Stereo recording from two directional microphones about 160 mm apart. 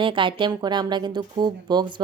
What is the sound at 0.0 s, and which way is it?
Speech, 30° right (ahead or behind).